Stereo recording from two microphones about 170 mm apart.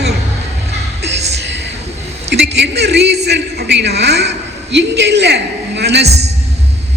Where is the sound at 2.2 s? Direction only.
90° right.